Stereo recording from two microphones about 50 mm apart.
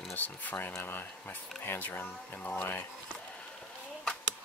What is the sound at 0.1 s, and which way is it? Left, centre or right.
Speech, left.